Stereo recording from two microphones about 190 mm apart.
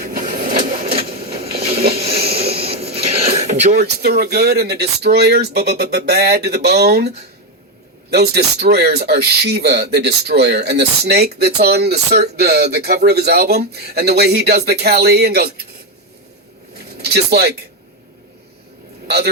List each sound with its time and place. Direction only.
0.1 s train: 50° right (ahead or behind)
1.0 s a sound: 30° right (ahead or behind)
3.8 s speech: 60° right (ahead or behind)
8.1 s speech: 55° right (ahead or behind)
16.7 s a sound: 55° right (ahead or behind)
19.0 s a man's voice: 55° right (ahead or behind)